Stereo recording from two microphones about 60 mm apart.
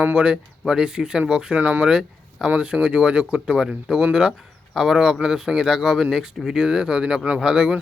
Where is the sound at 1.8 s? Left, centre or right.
Centre.